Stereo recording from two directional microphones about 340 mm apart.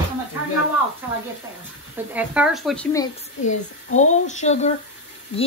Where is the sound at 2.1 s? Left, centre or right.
Centre.